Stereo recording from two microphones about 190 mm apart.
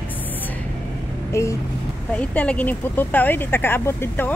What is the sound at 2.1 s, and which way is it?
Speech, 5° left (ahead or behind).